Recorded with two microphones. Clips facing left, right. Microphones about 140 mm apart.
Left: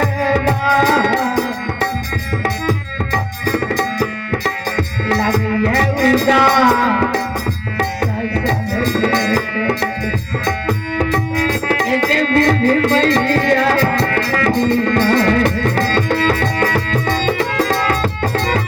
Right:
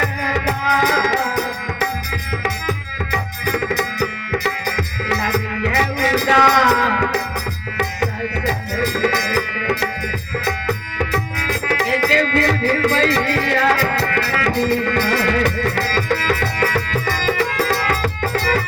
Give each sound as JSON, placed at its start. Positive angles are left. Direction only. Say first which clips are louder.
{"t": 2.4, "sound": "music", "louder": "left 5 dB", "side_deg": 40}
{"t": 5.3, "sound": "music", "louder": "left 5 dB", "side_deg": 35}
{"t": 8.4, "sound": "music", "louder": "left 2 dB", "side_deg": 40}